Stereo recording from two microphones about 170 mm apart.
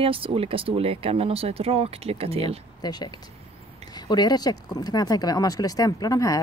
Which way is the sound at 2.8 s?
25° left (ahead or behind).